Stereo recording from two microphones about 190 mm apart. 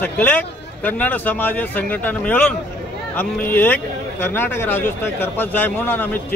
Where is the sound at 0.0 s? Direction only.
10° left (ahead or behind).